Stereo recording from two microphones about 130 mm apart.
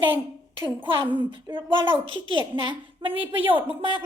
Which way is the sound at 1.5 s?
40° right (ahead or behind).